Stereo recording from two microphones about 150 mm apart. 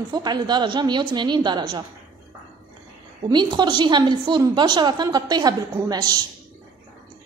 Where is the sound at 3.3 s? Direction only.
30° right (ahead or behind).